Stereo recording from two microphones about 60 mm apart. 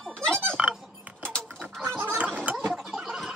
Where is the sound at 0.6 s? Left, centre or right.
Centre.